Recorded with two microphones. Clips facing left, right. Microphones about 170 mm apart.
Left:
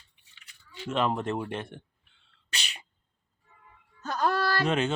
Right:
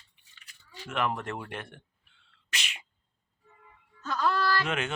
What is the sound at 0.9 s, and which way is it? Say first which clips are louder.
Speech: left 4 dB; 25° left (ahead or behind).